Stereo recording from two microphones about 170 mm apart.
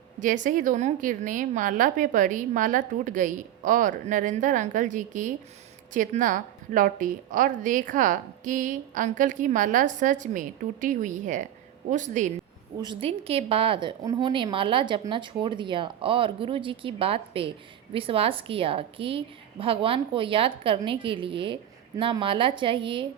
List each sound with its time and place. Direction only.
0.4 s a woman's voice: 50° right (ahead or behind)
12.8 s a woman's voice: 30° right (ahead or behind)